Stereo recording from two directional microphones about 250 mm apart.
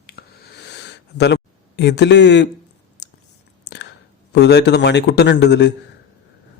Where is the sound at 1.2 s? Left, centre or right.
Left.